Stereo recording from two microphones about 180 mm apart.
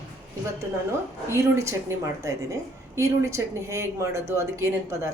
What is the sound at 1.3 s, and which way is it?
A woman's voice, 15° right (ahead or behind).